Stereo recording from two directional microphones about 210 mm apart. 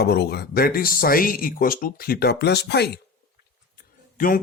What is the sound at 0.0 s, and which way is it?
Speech, 50° left (ahead or behind).